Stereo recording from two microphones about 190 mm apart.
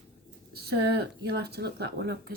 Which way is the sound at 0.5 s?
55° right (ahead or behind).